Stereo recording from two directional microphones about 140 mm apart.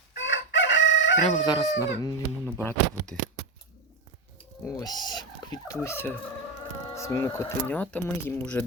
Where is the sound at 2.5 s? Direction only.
15° left (ahead or behind).